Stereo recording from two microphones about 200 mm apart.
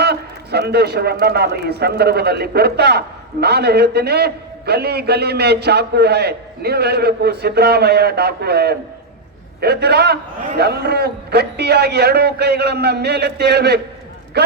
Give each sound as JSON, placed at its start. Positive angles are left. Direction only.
{"t": 0.0, "sound": "a man's voice", "side_deg": -55}